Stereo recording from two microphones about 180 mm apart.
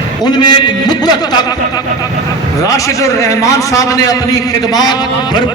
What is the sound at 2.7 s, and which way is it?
A man's voice, 15° left (ahead or behind).